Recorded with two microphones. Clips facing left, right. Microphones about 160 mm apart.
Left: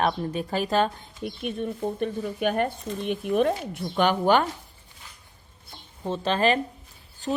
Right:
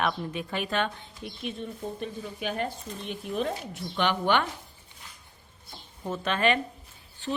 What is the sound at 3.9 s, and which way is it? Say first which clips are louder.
Speech: left 5 dB; 45° left (ahead or behind).